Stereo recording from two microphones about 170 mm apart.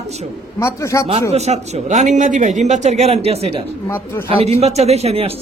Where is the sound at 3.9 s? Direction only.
15° left (ahead or behind).